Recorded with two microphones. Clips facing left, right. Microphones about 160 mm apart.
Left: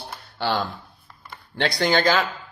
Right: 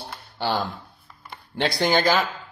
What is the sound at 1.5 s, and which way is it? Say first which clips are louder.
Speech: even; 10° right (ahead or behind).